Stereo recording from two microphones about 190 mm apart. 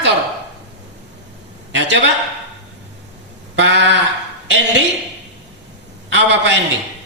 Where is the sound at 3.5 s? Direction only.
70° right (ahead or behind).